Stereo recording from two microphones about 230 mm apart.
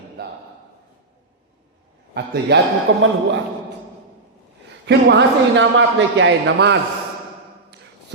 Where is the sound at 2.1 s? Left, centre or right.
Right.